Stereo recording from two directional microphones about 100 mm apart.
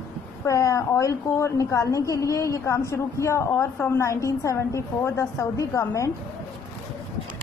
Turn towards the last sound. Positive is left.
turn(degrees=30)  # may be behind; listen again after turning